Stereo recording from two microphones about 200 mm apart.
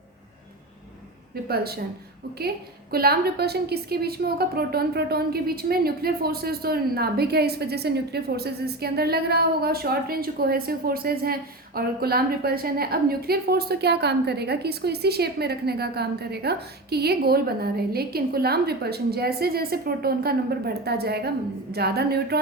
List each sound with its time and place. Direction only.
1.5 s a woman's voice: 50° right (ahead or behind)
2.9 s a woman's voice: 50° right (ahead or behind)